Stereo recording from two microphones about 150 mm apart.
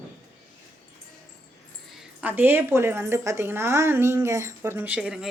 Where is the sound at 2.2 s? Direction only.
10° right (ahead or behind).